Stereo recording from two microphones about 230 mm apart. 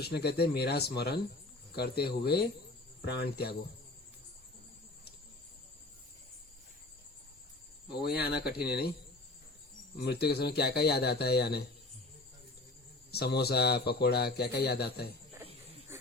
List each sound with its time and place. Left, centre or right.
0.0 s a man's voice: left
8.0 s a man's voice: left
10.0 s a man's voice: left
13.1 s a man's voice: left